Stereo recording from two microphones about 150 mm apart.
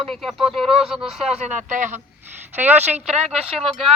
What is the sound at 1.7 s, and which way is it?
Speech, 55° right (ahead or behind).